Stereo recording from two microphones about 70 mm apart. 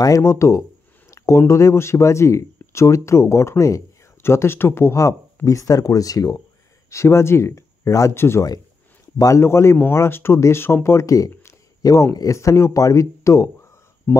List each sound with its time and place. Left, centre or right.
0.2 s a sound: left
1.5 s speech: left
4.9 s speech: left
6.9 s speech: left
8.1 s speech: left
14.1 s speech: left